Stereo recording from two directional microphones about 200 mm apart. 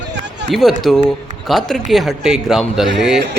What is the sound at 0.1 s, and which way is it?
Run, 60° right (ahead or behind).